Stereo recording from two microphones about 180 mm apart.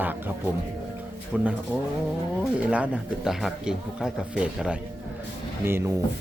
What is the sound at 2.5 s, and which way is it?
A man's voice, 5° right (ahead or behind).